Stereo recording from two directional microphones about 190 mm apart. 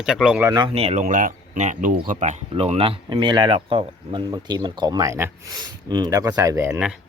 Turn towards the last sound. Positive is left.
turn(degrees=-5)  # may be behind; listen again after turning